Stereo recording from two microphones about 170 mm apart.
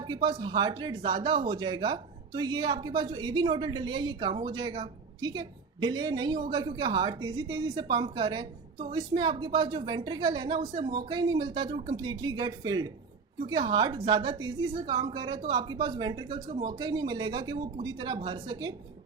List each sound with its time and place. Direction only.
0.0 s a woman's voice: 25° right (ahead or behind)
10.6 s speech: 45° right (ahead or behind)
10.8 s a woman's voice: 25° right (ahead or behind)